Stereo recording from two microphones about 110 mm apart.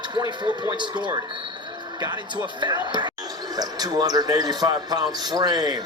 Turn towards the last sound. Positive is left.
turn(degrees=-40)  # may be behind; listen again after turning